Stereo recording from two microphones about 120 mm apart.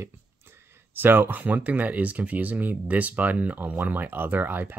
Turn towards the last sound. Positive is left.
turn(degrees=-15)  # may be behind; listen again after turning